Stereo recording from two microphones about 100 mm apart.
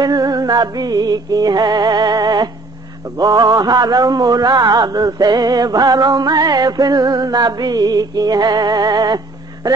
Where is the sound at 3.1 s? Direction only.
40° right (ahead or behind).